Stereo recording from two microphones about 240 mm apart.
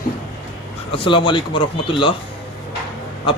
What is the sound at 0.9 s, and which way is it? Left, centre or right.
A man's voice, left.